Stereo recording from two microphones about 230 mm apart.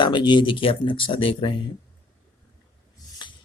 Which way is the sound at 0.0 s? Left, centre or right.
Centre.